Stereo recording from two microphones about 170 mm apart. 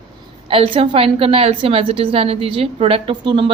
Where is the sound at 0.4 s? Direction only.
30° right (ahead or behind).